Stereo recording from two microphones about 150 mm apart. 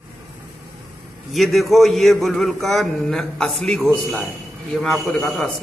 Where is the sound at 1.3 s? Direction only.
Centre (ahead or behind).